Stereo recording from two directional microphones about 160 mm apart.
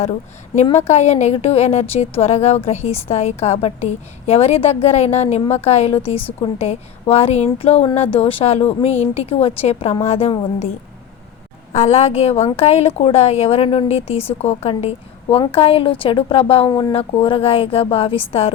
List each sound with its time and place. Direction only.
0.9 s a woman's voice: 45° left (ahead or behind)
11.7 s a woman's voice: 45° left (ahead or behind)